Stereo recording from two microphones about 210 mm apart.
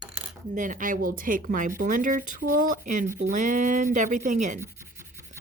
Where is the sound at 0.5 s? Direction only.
40° right (ahead or behind).